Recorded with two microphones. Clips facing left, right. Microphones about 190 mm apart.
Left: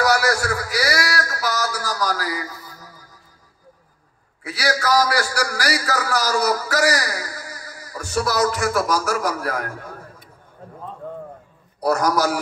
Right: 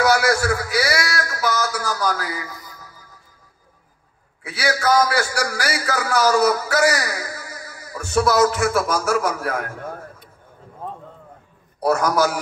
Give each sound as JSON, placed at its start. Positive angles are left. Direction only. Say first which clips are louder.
{"t": 0.0, "sound": "a sound", "louder": "right 2 dB", "side_deg": 35}
{"t": 4.5, "sound": "a man's voice", "louder": "right 1 dB", "side_deg": 35}
{"t": 11.8, "sound": "a man's voice", "louder": "right 1 dB", "side_deg": 35}